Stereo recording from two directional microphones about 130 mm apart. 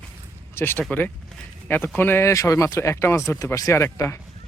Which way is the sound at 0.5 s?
15° left (ahead or behind).